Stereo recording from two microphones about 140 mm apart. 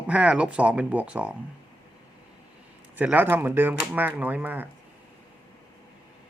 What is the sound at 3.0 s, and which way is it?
A man's voice, 10° right (ahead or behind).